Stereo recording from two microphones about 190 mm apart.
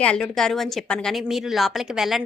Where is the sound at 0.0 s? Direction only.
5° left (ahead or behind).